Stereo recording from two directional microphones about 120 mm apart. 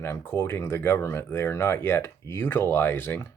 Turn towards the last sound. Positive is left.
turn(degrees=20)  # may be behind; listen again after turning